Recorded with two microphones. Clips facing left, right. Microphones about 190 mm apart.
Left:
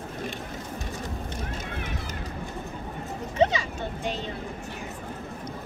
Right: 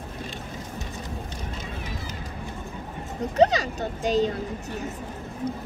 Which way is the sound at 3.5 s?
40° right (ahead or behind).